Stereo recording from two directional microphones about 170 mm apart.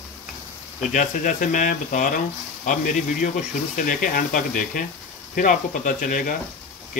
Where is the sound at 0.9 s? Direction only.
50° left (ahead or behind).